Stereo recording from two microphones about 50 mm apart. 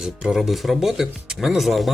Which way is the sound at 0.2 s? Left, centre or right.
Centre.